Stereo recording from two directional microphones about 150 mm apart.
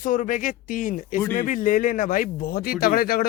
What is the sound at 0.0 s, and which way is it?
Speech, 60° left (ahead or behind).